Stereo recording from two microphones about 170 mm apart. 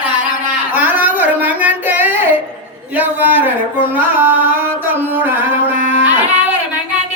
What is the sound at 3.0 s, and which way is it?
Singing, 10° right (ahead or behind).